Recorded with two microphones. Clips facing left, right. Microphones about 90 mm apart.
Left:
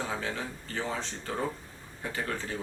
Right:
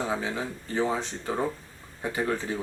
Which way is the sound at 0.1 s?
15° right (ahead or behind).